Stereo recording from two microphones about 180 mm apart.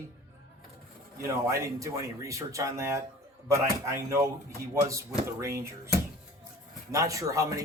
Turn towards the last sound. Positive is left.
turn(degrees=-20)  # may be behind; listen again after turning